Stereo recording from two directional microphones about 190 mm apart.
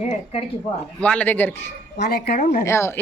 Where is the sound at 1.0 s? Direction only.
5° left (ahead or behind).